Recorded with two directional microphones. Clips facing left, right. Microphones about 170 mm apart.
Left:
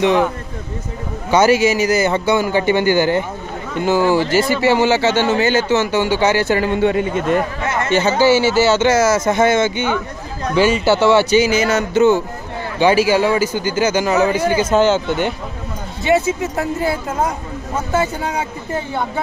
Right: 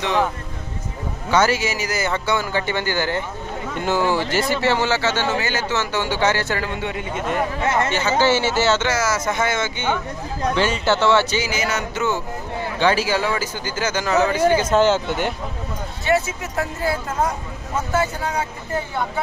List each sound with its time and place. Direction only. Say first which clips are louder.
0.0 s speech: left 6 dB; 15° left (ahead or behind)
1.3 s speech: left 6 dB; 15° left (ahead or behind)
3.7 s speech: left 6 dB; 5° left (ahead or behind)
7.6 s speech: right 1 dB; 25° right (ahead or behind)
8.2 s speech: left 5 dB; 10° left (ahead or behind)
8.8 s speech: left 8 dB; 25° left (ahead or behind)
10.5 s speech: left 6 dB; 5° left (ahead or behind); by 12.2 s 25° left (ahead or behind)
12.7 s speech: left 6 dB; 10° left (ahead or behind)
16.0 s speech: left 5 dB; 20° left (ahead or behind)
17.9 s speech: left 3 dB; 20° left (ahead or behind)